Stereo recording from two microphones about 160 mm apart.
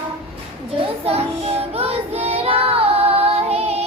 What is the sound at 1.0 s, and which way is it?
Child singing, 40° right (ahead or behind).